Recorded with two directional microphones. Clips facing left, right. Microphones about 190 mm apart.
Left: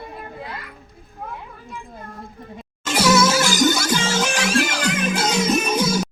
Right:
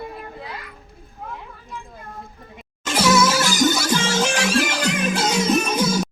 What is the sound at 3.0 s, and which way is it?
Music, 20° left (ahead or behind).